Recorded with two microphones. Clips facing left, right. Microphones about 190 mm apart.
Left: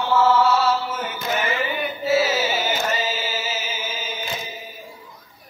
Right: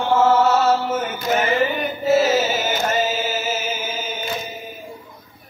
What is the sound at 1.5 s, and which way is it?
Music, 45° right (ahead or behind).